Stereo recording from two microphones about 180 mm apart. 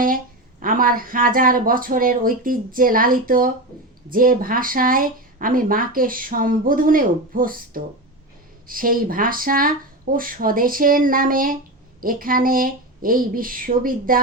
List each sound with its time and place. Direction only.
0.6 s speech: 50° right (ahead or behind)